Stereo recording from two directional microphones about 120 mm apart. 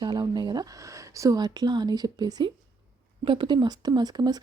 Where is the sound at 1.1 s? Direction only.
25° right (ahead or behind).